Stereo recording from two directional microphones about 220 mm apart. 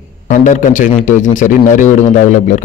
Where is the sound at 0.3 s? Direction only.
35° left (ahead or behind).